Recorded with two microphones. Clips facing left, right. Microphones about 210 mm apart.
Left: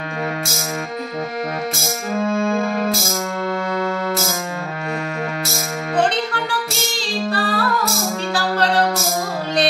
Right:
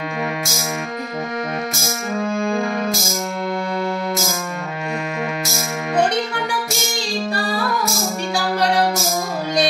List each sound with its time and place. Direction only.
7.2 s female singing: 10° right (ahead or behind)
8.4 s music: 10° right (ahead or behind)